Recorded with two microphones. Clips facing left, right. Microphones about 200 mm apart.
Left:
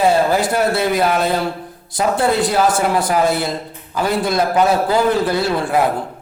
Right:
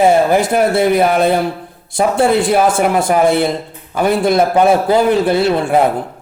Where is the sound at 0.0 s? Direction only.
20° right (ahead or behind).